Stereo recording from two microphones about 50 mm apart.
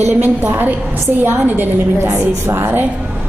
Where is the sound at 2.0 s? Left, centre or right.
Right.